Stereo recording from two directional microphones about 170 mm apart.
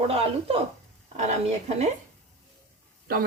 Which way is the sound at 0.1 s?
35° right (ahead or behind).